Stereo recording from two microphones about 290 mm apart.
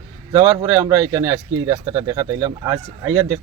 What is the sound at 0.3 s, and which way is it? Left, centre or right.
Speech, centre.